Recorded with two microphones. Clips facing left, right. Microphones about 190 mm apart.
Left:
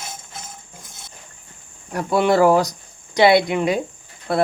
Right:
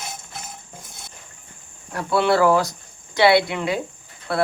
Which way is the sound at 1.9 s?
15° left (ahead or behind).